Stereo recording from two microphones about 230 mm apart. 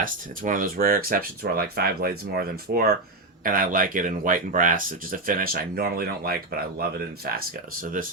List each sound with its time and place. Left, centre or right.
0.0 s speech: right